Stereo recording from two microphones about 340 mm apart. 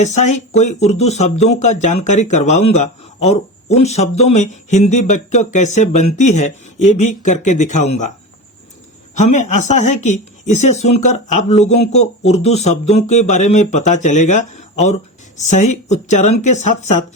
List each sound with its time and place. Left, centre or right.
0.5 s speech: centre
9.1 s speech: left